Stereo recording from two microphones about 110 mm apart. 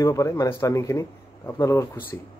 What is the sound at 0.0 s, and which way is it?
Music, 30° left (ahead or behind).